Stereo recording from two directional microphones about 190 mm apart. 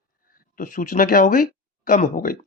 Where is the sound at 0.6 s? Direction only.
45° left (ahead or behind).